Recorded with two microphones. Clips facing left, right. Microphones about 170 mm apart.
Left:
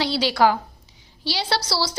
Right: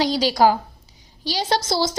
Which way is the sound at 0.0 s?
40° right (ahead or behind).